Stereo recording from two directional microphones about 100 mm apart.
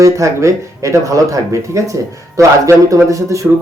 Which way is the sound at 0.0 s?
30° right (ahead or behind).